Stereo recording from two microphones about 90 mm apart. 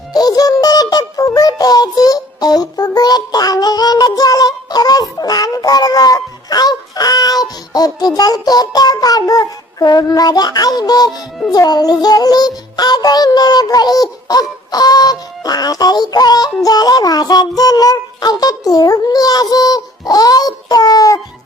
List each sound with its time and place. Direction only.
0.1 s music: 45° left (ahead or behind)
16.6 s child singing: 45° left (ahead or behind)